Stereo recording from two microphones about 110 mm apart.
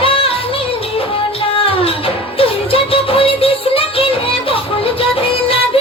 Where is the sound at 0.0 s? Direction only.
60° left (ahead or behind).